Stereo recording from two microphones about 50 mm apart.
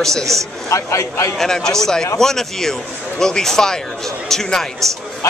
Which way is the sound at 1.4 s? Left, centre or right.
Centre.